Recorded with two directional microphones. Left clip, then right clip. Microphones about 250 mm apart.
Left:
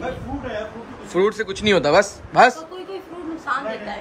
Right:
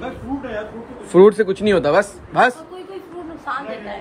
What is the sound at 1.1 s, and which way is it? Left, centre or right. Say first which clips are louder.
Speech: right 9 dB; centre.